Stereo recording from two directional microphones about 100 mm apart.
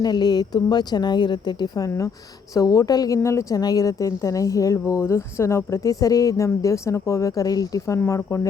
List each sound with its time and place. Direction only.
0.0 s a woman's voice: 45° left (ahead or behind); by 8.4 s 30° left (ahead or behind)